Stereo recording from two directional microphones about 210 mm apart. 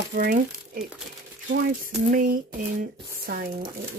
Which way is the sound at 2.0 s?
40° right (ahead or behind).